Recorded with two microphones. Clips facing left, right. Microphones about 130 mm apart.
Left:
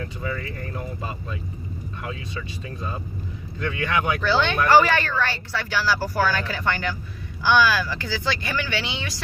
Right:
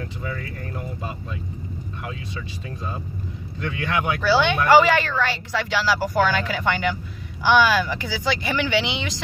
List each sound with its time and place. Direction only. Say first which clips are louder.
3.5 s speech: left 1 dB; 15° right (ahead or behind)